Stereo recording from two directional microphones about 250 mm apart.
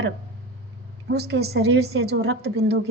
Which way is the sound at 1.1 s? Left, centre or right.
Right.